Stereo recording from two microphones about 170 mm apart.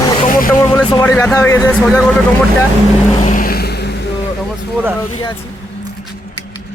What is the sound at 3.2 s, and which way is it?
Vehicle, 55° left (ahead or behind).